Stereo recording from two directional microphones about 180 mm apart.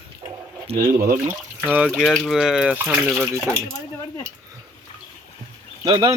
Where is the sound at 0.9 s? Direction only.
50° right (ahead or behind).